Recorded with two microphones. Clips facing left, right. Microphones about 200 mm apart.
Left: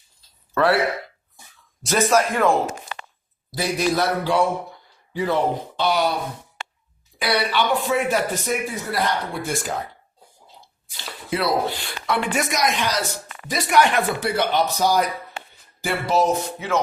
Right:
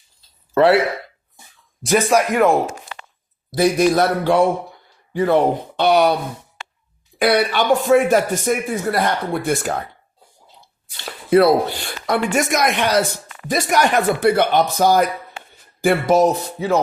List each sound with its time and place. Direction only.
0.5 s speech: 25° right (ahead or behind)
1.8 s speech: 15° right (ahead or behind)
3.6 s speech: 50° right (ahead or behind)
5.7 s speech: 60° right (ahead or behind)
7.2 s speech: 50° right (ahead or behind)
10.9 s speech: 55° right (ahead or behind)
13.5 s speech: 40° right (ahead or behind)
16.2 s speech: 35° right (ahead or behind)